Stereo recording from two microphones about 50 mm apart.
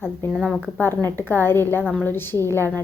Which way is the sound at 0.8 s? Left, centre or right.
Left.